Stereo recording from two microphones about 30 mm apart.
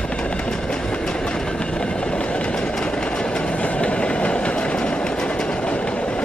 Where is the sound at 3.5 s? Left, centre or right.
Left.